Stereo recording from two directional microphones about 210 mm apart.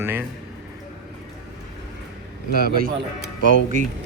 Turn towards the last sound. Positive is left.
turn(degrees=-35)  # may be behind; listen again after turning